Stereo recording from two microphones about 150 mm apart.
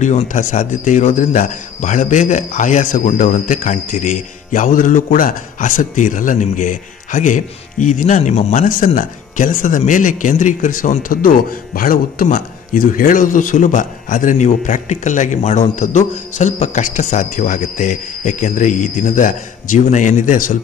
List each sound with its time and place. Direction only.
0.0 s speech: 55° left (ahead or behind)
8.6 s speech: 65° left (ahead or behind)